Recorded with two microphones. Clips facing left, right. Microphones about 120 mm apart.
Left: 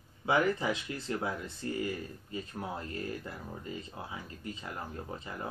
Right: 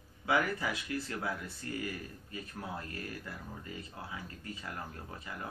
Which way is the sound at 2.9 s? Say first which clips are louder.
Left 4 dB; 25° left (ahead or behind).